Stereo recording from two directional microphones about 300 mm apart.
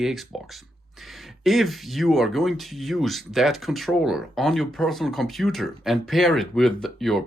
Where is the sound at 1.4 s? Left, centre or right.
Centre.